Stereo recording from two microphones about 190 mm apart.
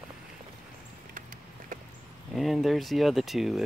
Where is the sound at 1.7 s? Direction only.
45° right (ahead or behind).